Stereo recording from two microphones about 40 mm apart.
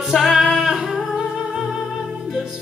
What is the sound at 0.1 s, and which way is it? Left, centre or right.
Music, centre.